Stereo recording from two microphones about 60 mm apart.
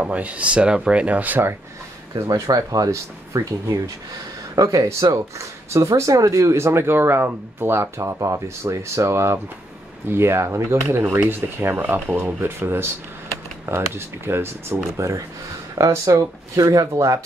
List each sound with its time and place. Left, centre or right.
0.0 s speech: right
2.1 s speech: right
8.2 s speech: right
15.0 s speech: right
15.9 s speech: right